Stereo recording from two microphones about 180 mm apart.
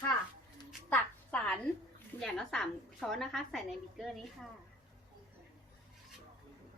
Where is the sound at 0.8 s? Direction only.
5° left (ahead or behind).